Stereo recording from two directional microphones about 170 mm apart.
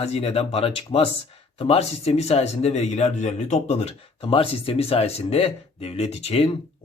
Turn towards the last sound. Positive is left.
turn(degrees=35)  # may be behind; listen again after turning